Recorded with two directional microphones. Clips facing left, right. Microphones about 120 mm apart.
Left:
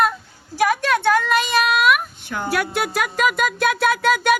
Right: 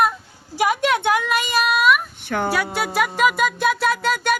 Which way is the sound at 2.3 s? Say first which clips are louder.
Right 5 dB; 60° right (ahead or behind).